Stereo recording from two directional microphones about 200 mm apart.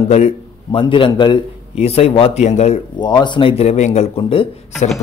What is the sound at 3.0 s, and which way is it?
Speech, 20° left (ahead or behind).